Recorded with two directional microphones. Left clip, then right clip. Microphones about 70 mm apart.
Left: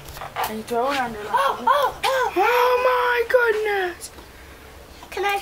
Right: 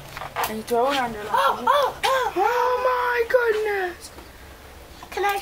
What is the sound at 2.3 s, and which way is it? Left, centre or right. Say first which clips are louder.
Whimper: left 3 dB; left.